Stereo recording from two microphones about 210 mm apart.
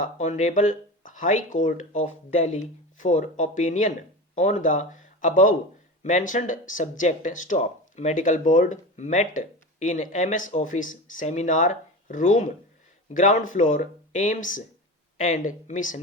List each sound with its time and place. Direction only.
0.0 s speech: 35° left (ahead or behind)